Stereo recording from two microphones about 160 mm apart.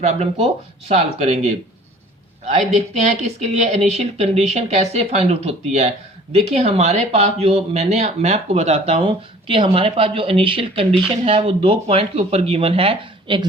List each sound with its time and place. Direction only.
0.0 s speech: 40° right (ahead or behind)